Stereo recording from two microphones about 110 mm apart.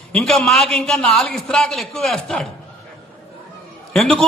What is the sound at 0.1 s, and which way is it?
A man's voice, 5° left (ahead or behind).